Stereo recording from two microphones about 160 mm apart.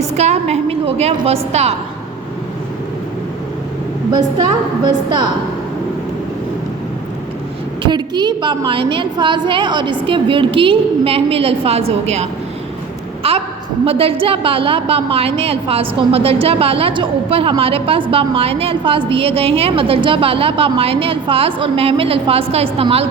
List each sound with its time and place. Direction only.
0.1 s a woman's voice: 45° right (ahead or behind)
4.8 s a woman's voice: 25° right (ahead or behind)
7.8 s a woman's voice: 30° right (ahead or behind)
13.2 s a sound: 35° right (ahead or behind)
13.8 s a woman's voice: 35° right (ahead or behind)